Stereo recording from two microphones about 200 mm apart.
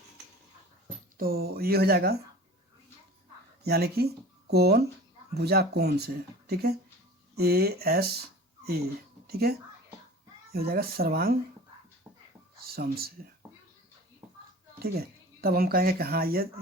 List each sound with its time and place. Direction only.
1.2 s speech: 50° right (ahead or behind)
3.6 s speech: 50° right (ahead or behind)
12.1 s dog: 15° right (ahead or behind)
12.5 s speech: 50° right (ahead or behind)
14.8 s speech: 50° right (ahead or behind)